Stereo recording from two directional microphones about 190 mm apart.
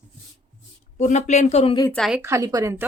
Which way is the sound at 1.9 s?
Centre (ahead or behind).